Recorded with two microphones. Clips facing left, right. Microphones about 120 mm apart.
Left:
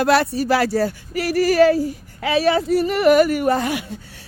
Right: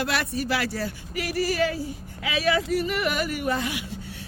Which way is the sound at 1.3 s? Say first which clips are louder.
Left 11 dB; 60° left (ahead or behind).